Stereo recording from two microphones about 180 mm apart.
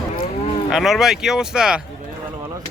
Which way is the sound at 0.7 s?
Centre (ahead or behind).